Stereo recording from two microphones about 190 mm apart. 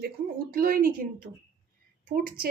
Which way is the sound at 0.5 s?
50° right (ahead or behind).